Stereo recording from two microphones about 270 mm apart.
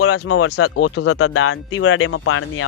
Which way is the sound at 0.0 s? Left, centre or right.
Left.